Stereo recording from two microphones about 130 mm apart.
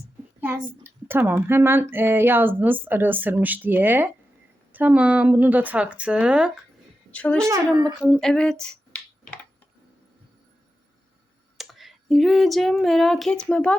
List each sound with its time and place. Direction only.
0.3 s a sound: 15° right (ahead or behind)
1.3 s a woman's voice: 15° right (ahead or behind)
7.1 s a woman's voice: 10° left (ahead or behind)
7.4 s speech: 25° right (ahead or behind)
8.0 s a sound: 5° left (ahead or behind)
11.5 s female singing: centre (ahead or behind)